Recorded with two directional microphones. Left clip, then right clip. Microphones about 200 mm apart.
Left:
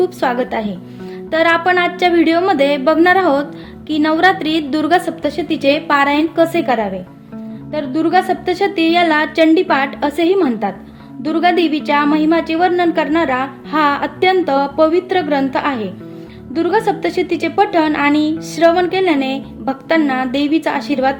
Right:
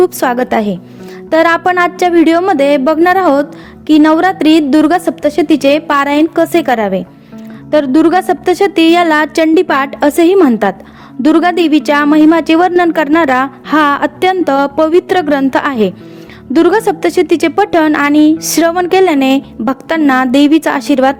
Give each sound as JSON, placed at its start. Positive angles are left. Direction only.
{"t": 0.0, "sound": "a woman's voice", "side_deg": -45}